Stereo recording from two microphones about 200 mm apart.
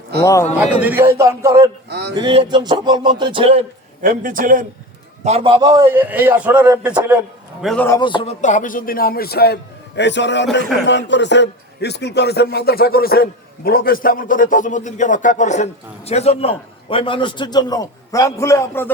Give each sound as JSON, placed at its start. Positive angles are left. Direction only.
{"t": 0.2, "sound": "a man's voice", "side_deg": 15}
{"t": 0.6, "sound": "a man's voice", "side_deg": -10}
{"t": 1.9, "sound": "a sound", "side_deg": -55}
{"t": 2.1, "sound": "music", "side_deg": -25}
{"t": 4.0, "sound": "a man's voice", "side_deg": -40}
{"t": 5.2, "sound": "a man's voice", "side_deg": -30}
{"t": 7.9, "sound": "speech", "side_deg": 20}